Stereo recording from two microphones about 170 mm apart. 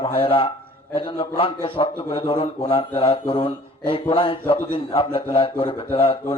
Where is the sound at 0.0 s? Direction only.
30° left (ahead or behind).